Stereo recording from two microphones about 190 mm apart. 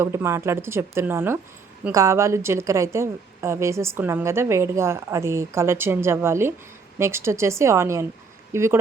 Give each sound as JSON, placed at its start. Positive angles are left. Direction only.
{"t": 0.0, "sound": "a woman's voice", "side_deg": -15}